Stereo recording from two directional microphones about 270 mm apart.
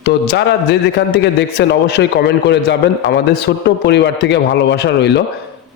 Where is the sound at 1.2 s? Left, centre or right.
Left.